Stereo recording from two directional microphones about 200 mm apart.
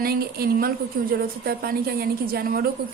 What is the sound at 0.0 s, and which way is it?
A woman's voice, 50° right (ahead or behind).